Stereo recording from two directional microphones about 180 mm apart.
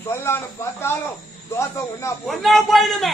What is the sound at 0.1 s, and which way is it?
Speech, 15° left (ahead or behind).